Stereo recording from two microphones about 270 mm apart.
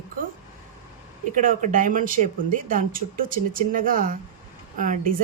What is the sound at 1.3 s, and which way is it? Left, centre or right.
Speech, right.